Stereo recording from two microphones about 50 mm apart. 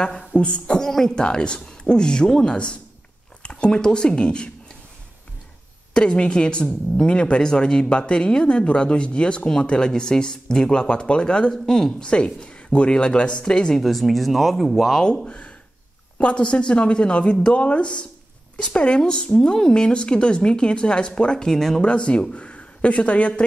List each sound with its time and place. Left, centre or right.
0.4 s speech: left
0.7 s speech: centre
5.9 s speech: centre
11.5 s speech: centre
12.0 s speech: centre
13.7 s speech: centre
15.2 s speech: left; by 21.8 s centre
21.8 s speech: left